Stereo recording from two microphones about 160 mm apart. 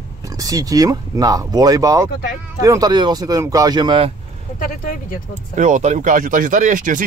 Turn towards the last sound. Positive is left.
turn(degrees=-55)  # may be behind; listen again after turning